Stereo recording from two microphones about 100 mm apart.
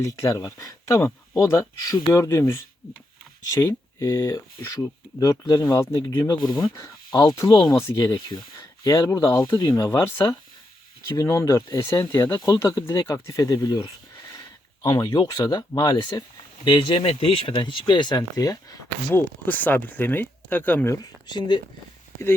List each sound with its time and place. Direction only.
0.0 s speech: 35° left (ahead or behind)
6.0 s speech: 50° left (ahead or behind)
6.7 s speech: 30° left (ahead or behind)
7.4 s speech: 55° left (ahead or behind)
7.7 s speech: 30° left (ahead or behind)
8.1 s speech: 50° left (ahead or behind); by 9.6 s 30° left (ahead or behind)
9.6 s speech: 50° left (ahead or behind)
9.8 s speech: 30° left (ahead or behind)
14.8 s speech: 40° left (ahead or behind)
17.0 s speech: 75° left (ahead or behind); by 18.8 s 40° left (ahead or behind)
19.1 s speech: 15° left (ahead or behind)
20.9 s speech: 45° left (ahead or behind)